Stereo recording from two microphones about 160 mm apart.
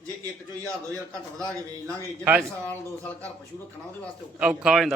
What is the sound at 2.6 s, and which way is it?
Speech, 10° left (ahead or behind).